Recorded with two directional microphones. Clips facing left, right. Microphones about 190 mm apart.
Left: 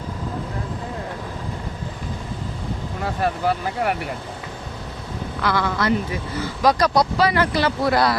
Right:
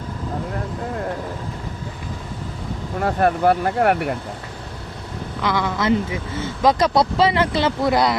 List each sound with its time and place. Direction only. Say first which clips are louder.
3.0 s speech: right 6 dB; 55° right (ahead or behind)
5.4 s speech: even; 20° right (ahead or behind)